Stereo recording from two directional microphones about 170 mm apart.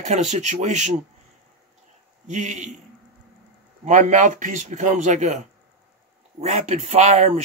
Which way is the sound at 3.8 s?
45° right (ahead or behind).